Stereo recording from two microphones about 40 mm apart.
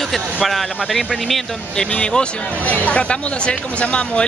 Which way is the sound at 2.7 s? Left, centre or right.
Left.